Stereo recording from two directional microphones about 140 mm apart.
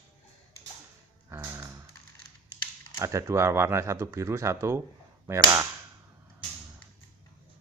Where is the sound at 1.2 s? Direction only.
20° right (ahead or behind).